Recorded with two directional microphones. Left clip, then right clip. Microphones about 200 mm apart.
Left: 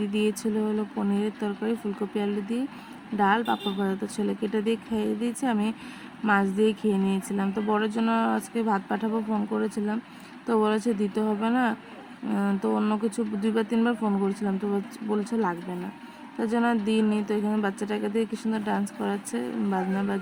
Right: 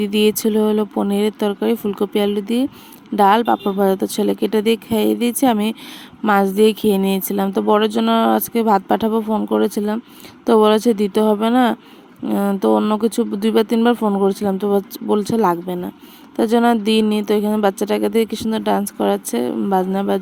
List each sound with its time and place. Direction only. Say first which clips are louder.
0.1 s a woman's voice: right 13 dB; 45° right (ahead or behind)